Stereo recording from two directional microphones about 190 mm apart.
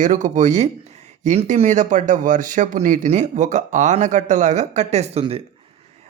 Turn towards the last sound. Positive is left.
turn(degrees=-30)  # may be behind; listen again after turning